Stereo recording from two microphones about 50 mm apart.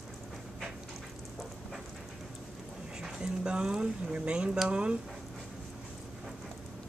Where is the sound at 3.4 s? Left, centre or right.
Centre.